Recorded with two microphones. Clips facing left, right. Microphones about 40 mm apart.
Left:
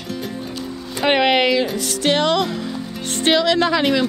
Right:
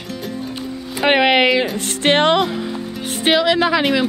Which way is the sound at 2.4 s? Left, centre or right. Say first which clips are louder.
Right 2 dB; centre.